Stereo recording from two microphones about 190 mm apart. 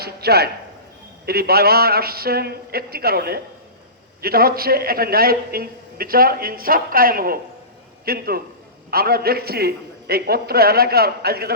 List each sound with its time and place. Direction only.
0.0 s a man's voice: 55° right (ahead or behind)